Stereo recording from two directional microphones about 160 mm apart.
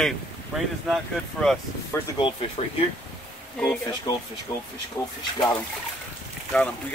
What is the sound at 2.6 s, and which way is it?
Speech, 40° left (ahead or behind).